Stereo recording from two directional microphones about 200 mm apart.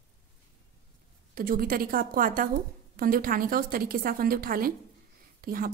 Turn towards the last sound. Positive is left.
turn(degrees=-45)  # may be behind; listen again after turning